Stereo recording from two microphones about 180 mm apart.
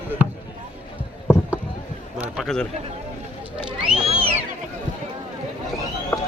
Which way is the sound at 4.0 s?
35° right (ahead or behind).